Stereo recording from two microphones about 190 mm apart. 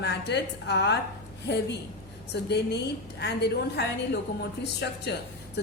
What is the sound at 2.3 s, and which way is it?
A woman's voice, 60° left (ahead or behind).